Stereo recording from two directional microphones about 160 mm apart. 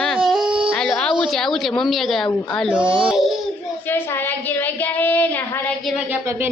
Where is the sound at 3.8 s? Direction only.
15° left (ahead or behind).